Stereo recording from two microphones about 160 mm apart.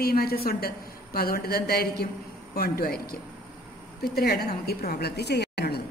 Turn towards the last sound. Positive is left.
turn(degrees=85)